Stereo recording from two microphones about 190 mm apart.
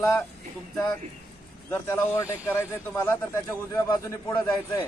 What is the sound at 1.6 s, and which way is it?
Speech, 15° left (ahead or behind).